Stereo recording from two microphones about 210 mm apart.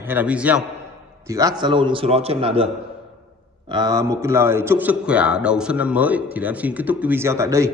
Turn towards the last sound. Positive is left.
turn(degrees=-15)  # may be behind; listen again after turning